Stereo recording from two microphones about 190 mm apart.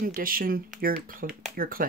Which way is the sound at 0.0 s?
50° right (ahead or behind).